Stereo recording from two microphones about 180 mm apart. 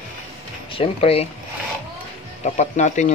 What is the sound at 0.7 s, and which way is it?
Speech, 30° left (ahead or behind).